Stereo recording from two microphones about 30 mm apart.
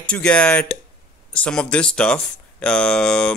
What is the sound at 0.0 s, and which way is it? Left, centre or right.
Speech, left.